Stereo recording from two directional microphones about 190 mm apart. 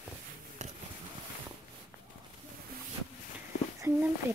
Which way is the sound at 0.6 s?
40° right (ahead or behind).